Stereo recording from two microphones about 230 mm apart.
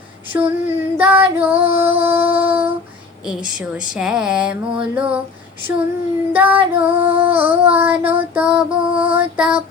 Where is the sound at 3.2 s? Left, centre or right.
Centre.